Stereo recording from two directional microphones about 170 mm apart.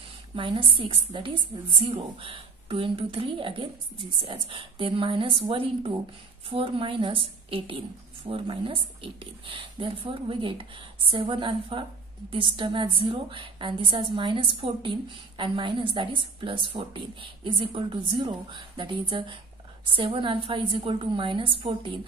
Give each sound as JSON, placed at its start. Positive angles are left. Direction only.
{"t": 0.4, "sound": "a woman's voice", "side_deg": -30}